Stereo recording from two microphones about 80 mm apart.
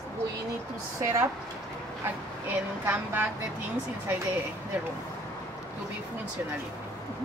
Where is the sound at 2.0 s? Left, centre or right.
Right.